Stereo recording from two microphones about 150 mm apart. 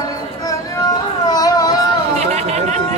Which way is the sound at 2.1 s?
45° right (ahead or behind).